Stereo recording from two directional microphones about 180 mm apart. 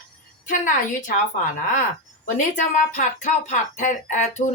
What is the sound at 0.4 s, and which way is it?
Speech, 45° left (ahead or behind).